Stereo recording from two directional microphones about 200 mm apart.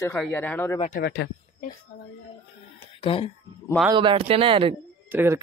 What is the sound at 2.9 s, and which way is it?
Speech, 25° left (ahead or behind).